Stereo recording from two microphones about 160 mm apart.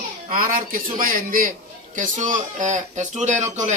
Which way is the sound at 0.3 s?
60° right (ahead or behind).